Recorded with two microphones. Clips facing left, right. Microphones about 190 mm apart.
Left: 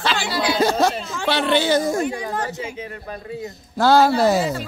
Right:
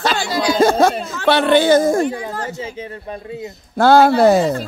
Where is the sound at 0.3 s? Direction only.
45° right (ahead or behind).